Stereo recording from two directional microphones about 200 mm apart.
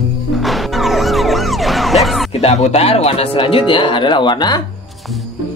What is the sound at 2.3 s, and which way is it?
Speech, 35° left (ahead or behind).